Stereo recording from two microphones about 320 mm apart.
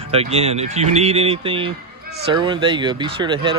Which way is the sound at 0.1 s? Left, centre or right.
Centre.